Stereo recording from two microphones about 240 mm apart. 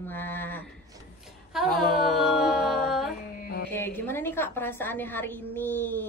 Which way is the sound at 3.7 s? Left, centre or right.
Centre.